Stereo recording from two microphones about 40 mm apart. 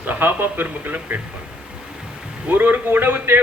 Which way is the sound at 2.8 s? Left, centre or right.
Right.